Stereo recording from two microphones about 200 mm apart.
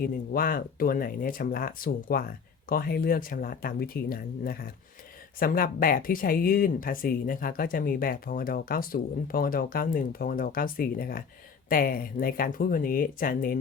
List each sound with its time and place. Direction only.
0.0 s speech: 45° left (ahead or behind)